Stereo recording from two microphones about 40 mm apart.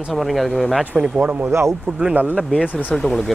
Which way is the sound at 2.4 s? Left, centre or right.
Centre.